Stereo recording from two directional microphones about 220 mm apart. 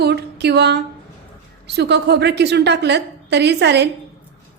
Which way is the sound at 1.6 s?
50° right (ahead or behind).